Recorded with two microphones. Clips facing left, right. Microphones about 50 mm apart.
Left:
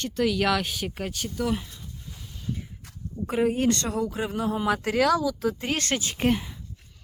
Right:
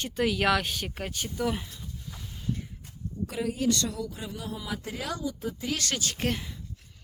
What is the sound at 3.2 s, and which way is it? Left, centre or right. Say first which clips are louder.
Speech: left 5 dB; left.